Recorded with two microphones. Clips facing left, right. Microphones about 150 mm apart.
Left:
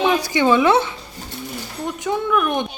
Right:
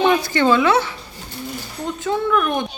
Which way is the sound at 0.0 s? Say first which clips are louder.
Right 2 dB; 5° left (ahead or behind).